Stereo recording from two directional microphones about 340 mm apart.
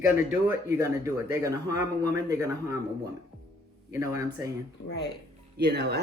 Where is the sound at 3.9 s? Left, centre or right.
Centre.